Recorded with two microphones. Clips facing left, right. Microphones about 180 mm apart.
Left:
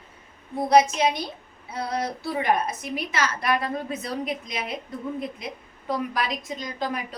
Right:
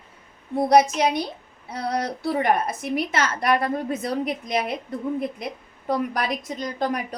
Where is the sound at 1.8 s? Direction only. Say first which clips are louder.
Right 4 dB; 55° right (ahead or behind).